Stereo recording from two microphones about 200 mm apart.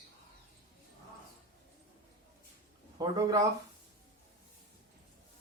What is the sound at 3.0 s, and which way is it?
Speech, 15° right (ahead or behind).